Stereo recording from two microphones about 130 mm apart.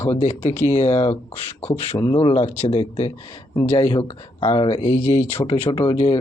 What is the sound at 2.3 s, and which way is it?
Speech, 55° left (ahead or behind).